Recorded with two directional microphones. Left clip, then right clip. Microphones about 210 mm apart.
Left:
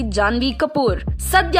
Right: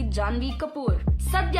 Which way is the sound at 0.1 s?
35° left (ahead or behind).